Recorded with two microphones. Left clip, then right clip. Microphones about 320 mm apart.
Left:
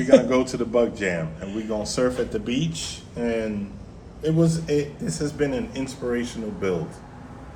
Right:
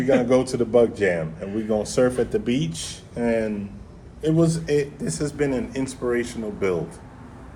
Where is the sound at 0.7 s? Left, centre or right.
Right.